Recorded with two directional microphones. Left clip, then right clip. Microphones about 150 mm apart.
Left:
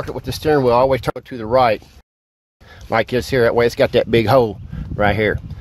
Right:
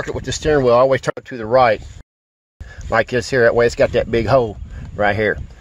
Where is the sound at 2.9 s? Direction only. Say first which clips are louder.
Right 1 dB; 45° left (ahead or behind).